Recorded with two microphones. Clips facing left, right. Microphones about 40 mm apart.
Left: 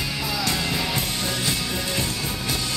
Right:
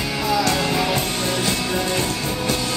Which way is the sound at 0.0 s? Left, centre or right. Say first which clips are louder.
Right 6 dB; centre.